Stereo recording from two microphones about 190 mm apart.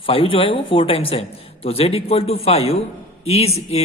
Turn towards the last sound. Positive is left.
turn(degrees=35)  # may be behind; listen again after turning